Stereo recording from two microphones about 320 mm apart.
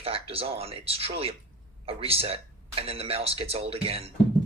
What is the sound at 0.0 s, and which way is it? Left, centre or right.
Speech, centre.